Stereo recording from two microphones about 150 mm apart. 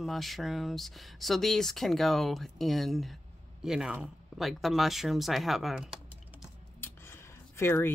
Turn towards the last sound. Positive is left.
turn(degrees=15)  # may be behind; listen again after turning